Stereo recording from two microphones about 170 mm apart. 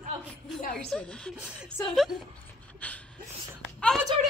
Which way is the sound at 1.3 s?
5° right (ahead or behind).